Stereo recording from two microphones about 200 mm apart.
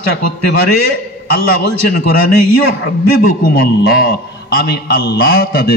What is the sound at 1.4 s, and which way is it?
Speech, 50° left (ahead or behind).